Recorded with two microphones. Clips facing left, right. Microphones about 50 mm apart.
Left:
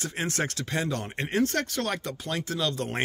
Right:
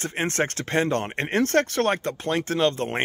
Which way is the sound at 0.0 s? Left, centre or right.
Right.